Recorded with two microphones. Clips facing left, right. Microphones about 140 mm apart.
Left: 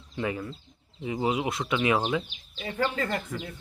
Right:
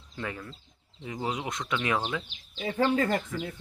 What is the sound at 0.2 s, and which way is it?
Speech, 15° left (ahead or behind).